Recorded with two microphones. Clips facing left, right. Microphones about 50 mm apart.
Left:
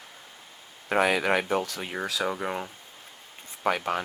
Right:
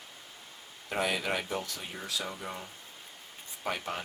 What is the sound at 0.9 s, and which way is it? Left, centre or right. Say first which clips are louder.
Speech: left 8 dB; left.